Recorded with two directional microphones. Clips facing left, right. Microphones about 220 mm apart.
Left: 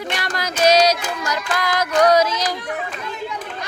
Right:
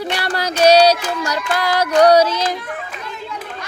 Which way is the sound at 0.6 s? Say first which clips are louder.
Right 4 dB; 30° right (ahead or behind).